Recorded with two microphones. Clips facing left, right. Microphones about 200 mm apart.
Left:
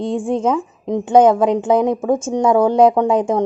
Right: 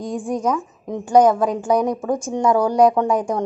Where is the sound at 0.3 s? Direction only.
25° left (ahead or behind).